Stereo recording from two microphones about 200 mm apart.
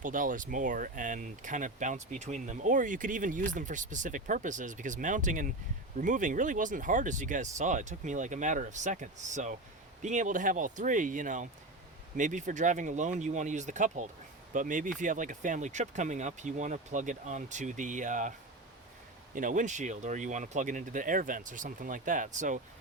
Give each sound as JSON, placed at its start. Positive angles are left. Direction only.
{"t": 0.0, "sound": "speech", "side_deg": -40}